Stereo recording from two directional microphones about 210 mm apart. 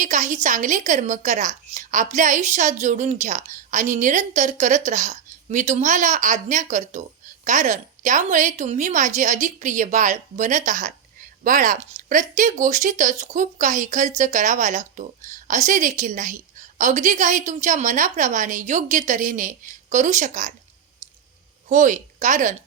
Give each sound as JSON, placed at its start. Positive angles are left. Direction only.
{"t": 0.0, "sound": "a woman's voice", "side_deg": -35}
{"t": 21.7, "sound": "a woman's voice", "side_deg": -35}